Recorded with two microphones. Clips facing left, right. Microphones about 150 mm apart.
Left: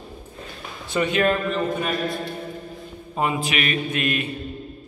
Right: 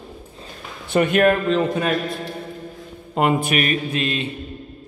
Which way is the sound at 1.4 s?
85° right.